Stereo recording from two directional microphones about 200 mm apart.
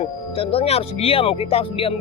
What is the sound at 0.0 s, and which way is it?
Speech, 30° left (ahead or behind).